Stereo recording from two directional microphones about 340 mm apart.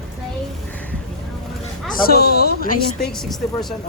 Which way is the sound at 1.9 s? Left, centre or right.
Left.